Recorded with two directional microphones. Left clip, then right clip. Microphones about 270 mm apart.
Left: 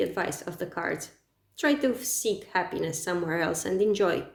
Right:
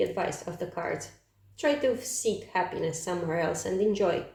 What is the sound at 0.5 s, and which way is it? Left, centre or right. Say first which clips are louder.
Speech: left 1 dB; left.